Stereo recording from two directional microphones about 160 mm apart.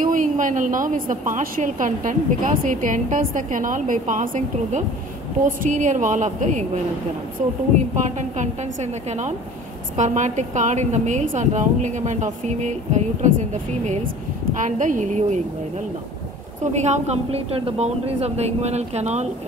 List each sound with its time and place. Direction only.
0.0 s a woman's voice: 55° right (ahead or behind)
9.9 s a woman's voice: 50° right (ahead or behind)
16.7 s a woman's voice: 45° right (ahead or behind)